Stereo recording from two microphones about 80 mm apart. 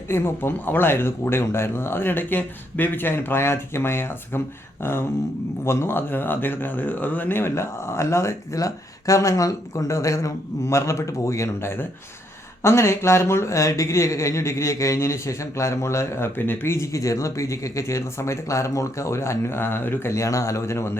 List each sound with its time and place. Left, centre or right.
0.1 s speech: left